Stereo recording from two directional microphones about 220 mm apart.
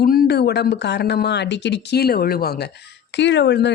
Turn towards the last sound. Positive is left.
turn(degrees=50)  # may be behind; listen again after turning